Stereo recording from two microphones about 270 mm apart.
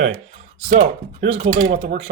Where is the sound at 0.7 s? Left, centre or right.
Right.